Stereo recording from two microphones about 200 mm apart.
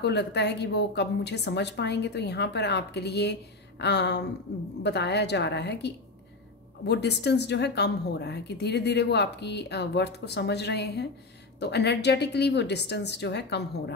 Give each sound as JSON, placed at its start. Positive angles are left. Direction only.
{"t": 0.0, "sound": "a woman's voice", "side_deg": 55}